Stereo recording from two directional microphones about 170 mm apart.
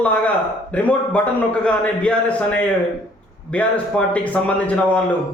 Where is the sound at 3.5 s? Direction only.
5° left (ahead or behind).